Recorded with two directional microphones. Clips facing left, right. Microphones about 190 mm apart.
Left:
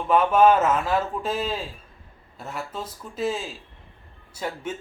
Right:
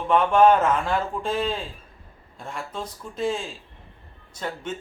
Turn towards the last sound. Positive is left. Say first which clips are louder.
# even
turn(degrees=10)  # may be behind; listen again after turning